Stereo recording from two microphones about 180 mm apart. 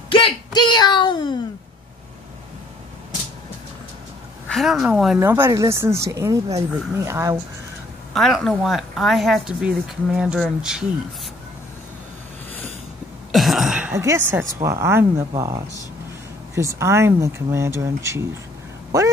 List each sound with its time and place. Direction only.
0.1 s a sound: 25° left (ahead or behind)
4.5 s a woman's voice: centre (ahead or behind)
5.2 s speech: 15° right (ahead or behind)
8.1 s speech: centre (ahead or behind)
13.3 s a sound: centre (ahead or behind)
14.6 s speech: 15° right (ahead or behind)
16.5 s speech: 15° right (ahead or behind)